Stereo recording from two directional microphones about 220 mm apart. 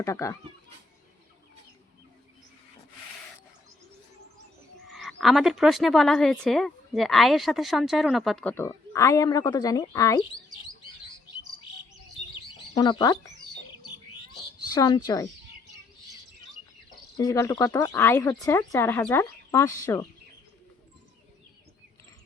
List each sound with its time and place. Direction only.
0.0 s speech: 15° left (ahead or behind)
4.9 s a woman's voice: centre (ahead or behind)
12.7 s speech: 20° left (ahead or behind)
14.8 s speech: 20° left (ahead or behind)
17.2 s speech: 15° left (ahead or behind)